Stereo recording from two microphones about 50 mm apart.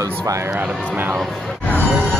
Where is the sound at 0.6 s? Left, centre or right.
Right.